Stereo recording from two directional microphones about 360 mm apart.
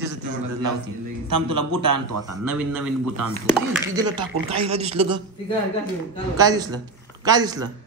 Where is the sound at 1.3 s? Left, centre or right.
Right.